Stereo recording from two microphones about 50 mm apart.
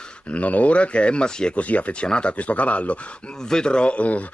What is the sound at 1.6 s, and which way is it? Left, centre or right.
Speech, left.